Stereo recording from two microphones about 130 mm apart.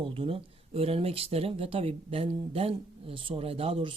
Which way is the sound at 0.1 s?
45° right (ahead or behind).